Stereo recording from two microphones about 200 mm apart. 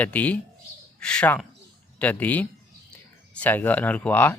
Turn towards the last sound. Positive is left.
turn(degrees=10)  # may be behind; listen again after turning